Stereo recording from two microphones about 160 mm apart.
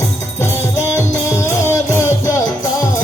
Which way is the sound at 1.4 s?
20° left (ahead or behind).